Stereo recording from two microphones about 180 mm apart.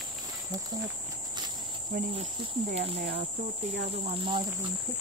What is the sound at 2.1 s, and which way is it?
Speech, 35° right (ahead or behind).